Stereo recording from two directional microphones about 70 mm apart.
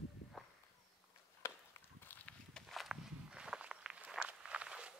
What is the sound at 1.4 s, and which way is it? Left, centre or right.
Chop, left.